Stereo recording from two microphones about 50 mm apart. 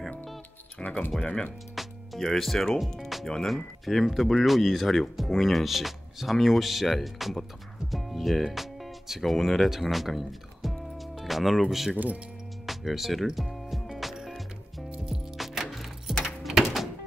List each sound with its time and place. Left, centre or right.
0.8 s speech: centre
1.8 s speech: centre
12.6 s music: centre
16.2 s a sound: centre